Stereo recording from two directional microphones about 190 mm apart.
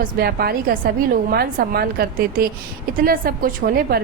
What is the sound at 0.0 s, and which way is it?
A woman's voice, 55° right (ahead or behind).